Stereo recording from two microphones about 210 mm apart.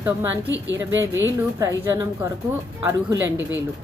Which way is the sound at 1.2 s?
15° right (ahead or behind).